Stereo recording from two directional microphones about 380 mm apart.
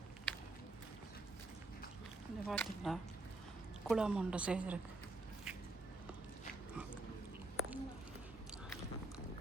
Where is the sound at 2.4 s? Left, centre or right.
Centre.